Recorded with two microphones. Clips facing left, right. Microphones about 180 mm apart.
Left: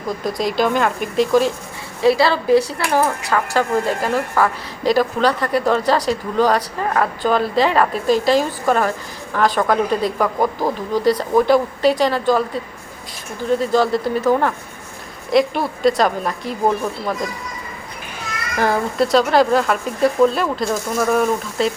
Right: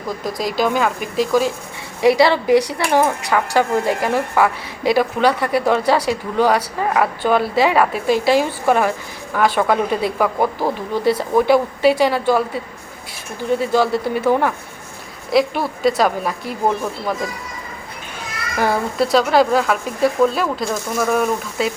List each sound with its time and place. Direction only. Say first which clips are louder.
0.3 s speech: even; centre (ahead or behind)
2.0 s speech: right 2 dB; 15° right (ahead or behind)
13.6 s speech: even; 5° right (ahead or behind)
18.6 s speech: even; 5° right (ahead or behind)